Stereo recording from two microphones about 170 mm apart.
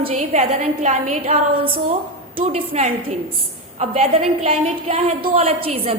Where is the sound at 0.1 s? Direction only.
45° right (ahead or behind).